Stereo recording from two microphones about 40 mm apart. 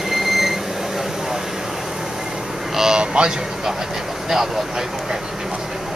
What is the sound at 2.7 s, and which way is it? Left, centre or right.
Vehicle, centre.